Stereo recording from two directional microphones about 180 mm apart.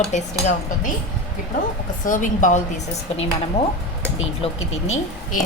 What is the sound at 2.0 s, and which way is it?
Speech, 45° left (ahead or behind).